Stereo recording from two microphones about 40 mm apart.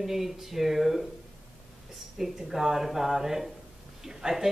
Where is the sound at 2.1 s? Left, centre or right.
Centre.